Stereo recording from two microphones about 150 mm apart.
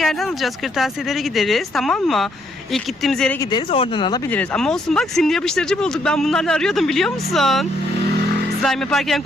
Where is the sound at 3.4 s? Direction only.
30° left (ahead or behind).